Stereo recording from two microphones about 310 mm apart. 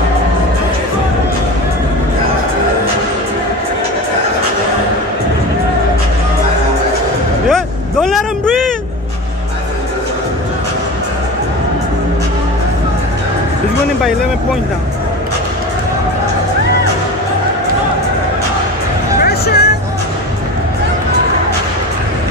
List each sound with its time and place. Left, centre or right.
7.5 s vehicle: centre
19.1 s music: left